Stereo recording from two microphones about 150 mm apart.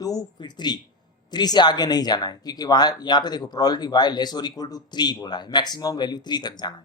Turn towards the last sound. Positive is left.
turn(degrees=25)  # may be behind; listen again after turning